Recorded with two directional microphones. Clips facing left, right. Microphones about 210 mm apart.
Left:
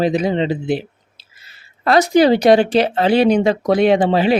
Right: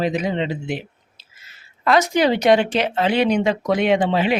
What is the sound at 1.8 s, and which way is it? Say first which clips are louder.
Speech: left 5 dB; 35° left (ahead or behind).